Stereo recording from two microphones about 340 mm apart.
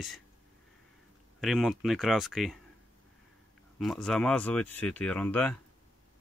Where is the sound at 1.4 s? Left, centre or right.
Centre.